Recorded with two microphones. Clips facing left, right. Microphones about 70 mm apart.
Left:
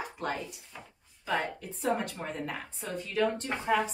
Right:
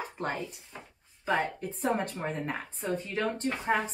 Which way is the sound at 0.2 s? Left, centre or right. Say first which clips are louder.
Right 1 dB; right.